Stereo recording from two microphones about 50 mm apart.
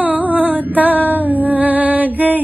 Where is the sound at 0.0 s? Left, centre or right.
Right.